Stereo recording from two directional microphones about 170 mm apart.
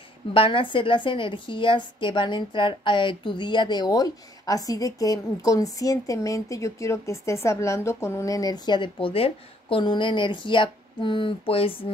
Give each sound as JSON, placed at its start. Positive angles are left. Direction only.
{"t": 0.3, "sound": "a woman's voice", "side_deg": 30}